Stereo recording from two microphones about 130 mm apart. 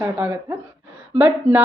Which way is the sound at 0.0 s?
15° right (ahead or behind).